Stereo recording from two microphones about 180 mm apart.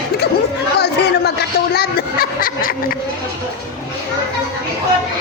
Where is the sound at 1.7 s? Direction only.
55° left (ahead or behind).